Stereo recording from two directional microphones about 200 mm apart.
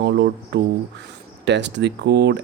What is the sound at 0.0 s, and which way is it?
Speech, 55° right (ahead or behind).